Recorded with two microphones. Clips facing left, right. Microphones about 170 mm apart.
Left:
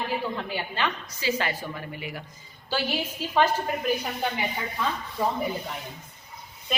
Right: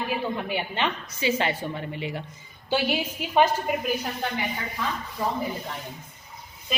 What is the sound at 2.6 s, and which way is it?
A woman's voice, 15° right (ahead or behind).